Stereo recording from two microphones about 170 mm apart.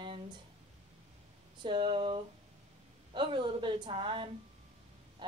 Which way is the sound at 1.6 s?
30° right (ahead or behind).